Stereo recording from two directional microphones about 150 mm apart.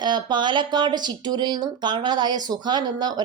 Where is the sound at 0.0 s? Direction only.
30° right (ahead or behind).